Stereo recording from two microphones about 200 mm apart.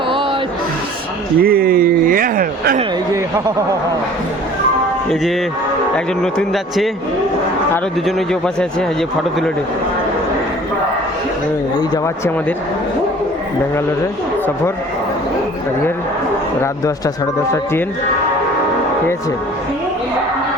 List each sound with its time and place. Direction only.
1.4 s speech: 50° right (ahead or behind)
6.3 s speech: centre (ahead or behind)
11.8 s speech: 15° left (ahead or behind)